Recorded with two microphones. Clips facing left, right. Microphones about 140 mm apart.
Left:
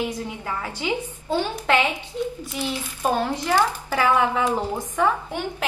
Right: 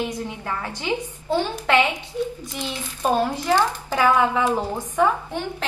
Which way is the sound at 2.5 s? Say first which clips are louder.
Left 2 dB; 10° left (ahead or behind).